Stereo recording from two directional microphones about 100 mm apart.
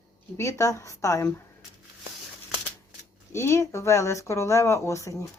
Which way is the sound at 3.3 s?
30° left (ahead or behind).